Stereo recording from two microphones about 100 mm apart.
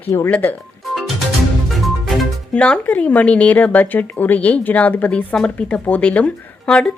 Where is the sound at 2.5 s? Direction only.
10° left (ahead or behind).